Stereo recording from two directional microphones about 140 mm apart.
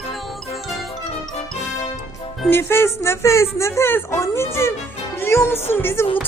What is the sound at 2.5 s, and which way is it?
Speech, 15° left (ahead or behind).